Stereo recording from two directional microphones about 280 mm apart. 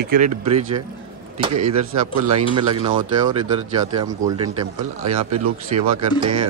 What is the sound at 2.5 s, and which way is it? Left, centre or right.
Speech, centre.